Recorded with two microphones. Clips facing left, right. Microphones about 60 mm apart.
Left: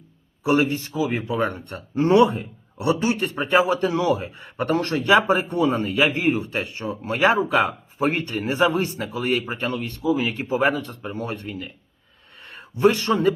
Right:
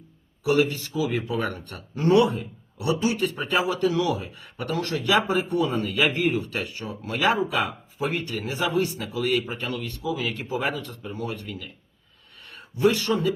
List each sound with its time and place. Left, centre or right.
0.4 s speech: left